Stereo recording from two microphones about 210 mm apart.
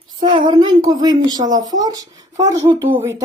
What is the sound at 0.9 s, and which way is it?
Speech, 20° right (ahead or behind).